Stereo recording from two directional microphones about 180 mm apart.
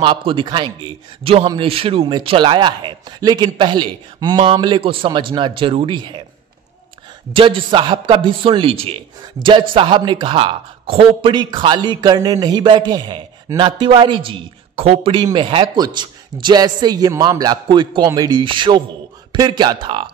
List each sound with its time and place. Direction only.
0.0 s a man's voice: 30° right (ahead or behind)
7.3 s a man's voice: 30° right (ahead or behind)